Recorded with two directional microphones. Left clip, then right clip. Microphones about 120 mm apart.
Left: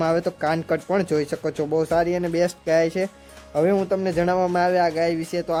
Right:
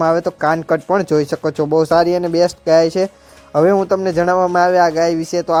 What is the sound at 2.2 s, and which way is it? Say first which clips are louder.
Speech: right 8 dB; 30° right (ahead or behind).